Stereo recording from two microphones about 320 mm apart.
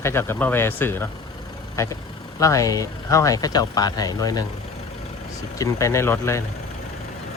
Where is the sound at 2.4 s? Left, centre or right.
Centre.